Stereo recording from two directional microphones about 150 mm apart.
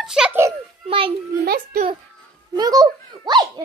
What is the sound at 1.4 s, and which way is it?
Speech, 90° right.